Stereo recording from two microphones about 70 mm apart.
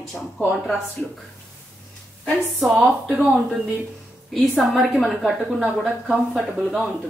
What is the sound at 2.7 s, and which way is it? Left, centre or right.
Speech, centre.